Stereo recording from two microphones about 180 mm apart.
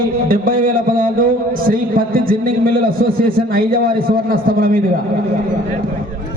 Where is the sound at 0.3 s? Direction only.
50° right (ahead or behind).